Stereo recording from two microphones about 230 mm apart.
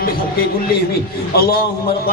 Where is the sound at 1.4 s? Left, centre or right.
Left.